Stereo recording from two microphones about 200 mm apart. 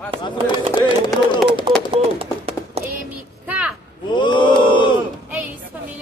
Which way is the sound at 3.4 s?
5° right (ahead or behind).